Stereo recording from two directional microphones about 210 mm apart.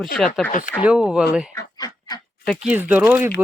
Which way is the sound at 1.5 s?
15° left (ahead or behind).